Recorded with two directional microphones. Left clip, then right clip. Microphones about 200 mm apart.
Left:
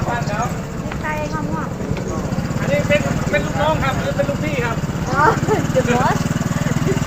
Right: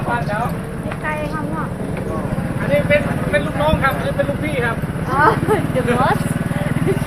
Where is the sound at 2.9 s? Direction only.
15° right (ahead or behind).